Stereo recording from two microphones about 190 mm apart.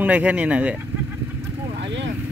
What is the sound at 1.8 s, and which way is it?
Vehicle, 70° right (ahead or behind).